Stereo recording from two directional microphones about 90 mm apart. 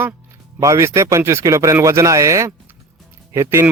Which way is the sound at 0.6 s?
35° right (ahead or behind).